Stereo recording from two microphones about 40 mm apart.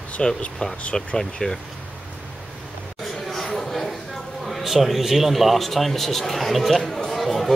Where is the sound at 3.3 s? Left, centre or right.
Centre.